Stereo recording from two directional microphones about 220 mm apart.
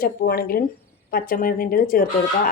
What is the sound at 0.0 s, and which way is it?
Speech, 40° left (ahead or behind).